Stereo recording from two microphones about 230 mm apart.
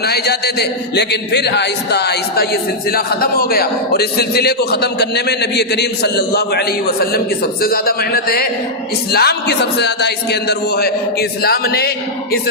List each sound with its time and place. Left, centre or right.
0.0 s a man's voice: left